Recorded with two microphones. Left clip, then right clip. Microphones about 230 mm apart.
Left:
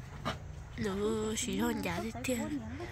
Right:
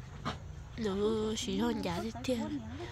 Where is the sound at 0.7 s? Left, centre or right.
Centre.